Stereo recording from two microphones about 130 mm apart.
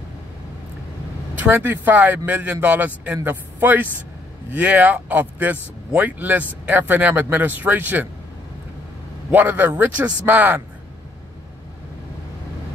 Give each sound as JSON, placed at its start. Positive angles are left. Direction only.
{"t": 1.4, "sound": "speech", "side_deg": -15}
{"t": 9.3, "sound": "speech", "side_deg": -15}